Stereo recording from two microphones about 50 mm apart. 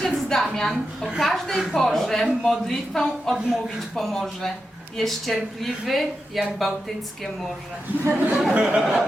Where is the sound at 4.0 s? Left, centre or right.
Centre.